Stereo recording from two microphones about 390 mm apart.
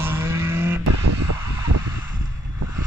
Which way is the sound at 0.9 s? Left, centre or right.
Right.